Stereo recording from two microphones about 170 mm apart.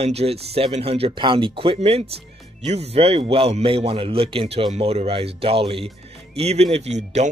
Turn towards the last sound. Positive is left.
turn(degrees=-40)  # may be behind; listen again after turning